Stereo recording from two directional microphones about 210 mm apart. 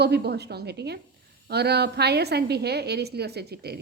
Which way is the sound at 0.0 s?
50° right (ahead or behind).